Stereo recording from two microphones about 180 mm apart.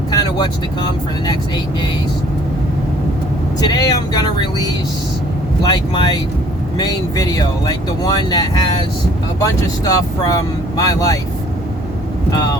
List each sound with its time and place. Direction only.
0.1 s vehicle: 25° left (ahead or behind)
3.6 s speech: 20° left (ahead or behind)